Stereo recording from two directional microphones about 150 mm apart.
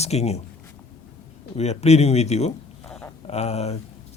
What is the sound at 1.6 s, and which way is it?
Speech, 45° left (ahead or behind).